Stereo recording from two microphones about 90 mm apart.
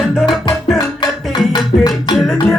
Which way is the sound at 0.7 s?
50° left (ahead or behind).